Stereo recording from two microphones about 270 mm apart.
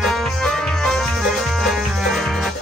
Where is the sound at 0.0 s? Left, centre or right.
Centre.